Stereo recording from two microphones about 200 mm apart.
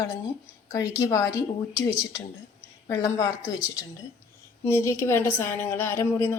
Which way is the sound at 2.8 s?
15° left (ahead or behind).